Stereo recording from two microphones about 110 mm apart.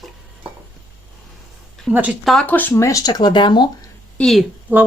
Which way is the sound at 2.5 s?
15° left (ahead or behind).